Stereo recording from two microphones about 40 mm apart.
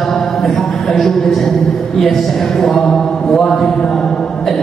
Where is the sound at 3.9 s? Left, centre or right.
Centre.